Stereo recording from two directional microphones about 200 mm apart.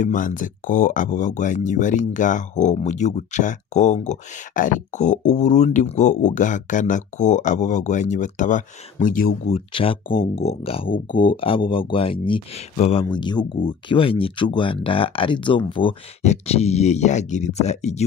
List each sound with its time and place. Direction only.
0.0 s speech: 40° left (ahead or behind)
9.5 s speech: 25° left (ahead or behind)